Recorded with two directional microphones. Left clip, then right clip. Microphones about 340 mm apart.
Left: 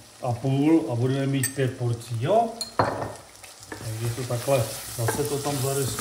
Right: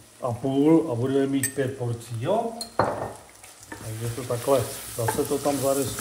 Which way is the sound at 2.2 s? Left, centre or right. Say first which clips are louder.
Left 3 dB; centre.